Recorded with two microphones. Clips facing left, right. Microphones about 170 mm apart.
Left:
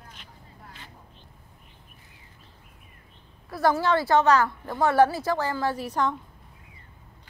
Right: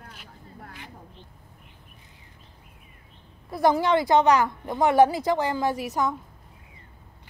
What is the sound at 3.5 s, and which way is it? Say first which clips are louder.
A woman's voice: right 2 dB; 20° right (ahead or behind).